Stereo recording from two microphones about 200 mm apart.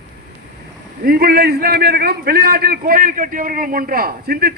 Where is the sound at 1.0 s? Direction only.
50° right (ahead or behind).